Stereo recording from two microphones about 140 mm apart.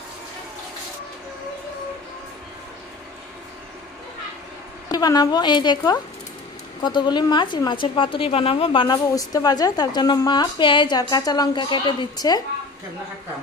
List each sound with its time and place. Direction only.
4.8 s a woman's voice: 30° left (ahead or behind)